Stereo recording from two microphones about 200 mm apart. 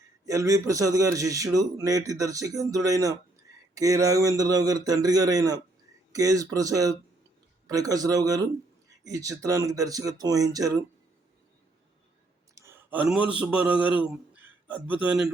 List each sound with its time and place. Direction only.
0.3 s a man's voice: 15° right (ahead or behind)
12.5 s a sound: 10° right (ahead or behind)
13.4 s a man's voice: 5° right (ahead or behind)